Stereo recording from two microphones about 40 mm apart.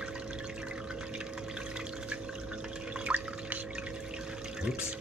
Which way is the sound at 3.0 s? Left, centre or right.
Right.